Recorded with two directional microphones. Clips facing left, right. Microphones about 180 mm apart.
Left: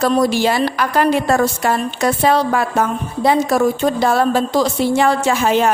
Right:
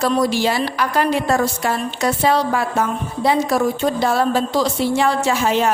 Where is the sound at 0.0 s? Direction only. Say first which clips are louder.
Left 3 dB; 50° left (ahead or behind).